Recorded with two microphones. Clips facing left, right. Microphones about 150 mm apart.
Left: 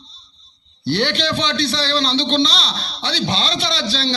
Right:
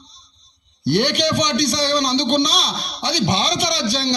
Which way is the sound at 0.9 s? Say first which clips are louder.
Right 2 dB; 15° right (ahead or behind).